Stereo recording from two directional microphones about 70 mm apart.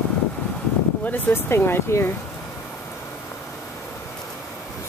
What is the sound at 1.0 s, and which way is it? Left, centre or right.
Speech, left.